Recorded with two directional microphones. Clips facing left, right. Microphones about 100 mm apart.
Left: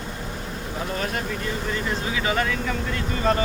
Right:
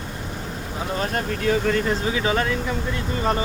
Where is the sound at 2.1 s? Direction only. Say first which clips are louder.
Left 1 dB; 30° right (ahead or behind).